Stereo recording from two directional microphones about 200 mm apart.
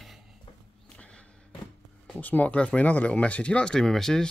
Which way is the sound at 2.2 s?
10° left (ahead or behind).